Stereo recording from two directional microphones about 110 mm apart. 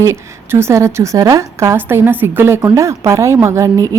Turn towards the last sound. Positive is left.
turn(degrees=-25)  # may be behind; listen again after turning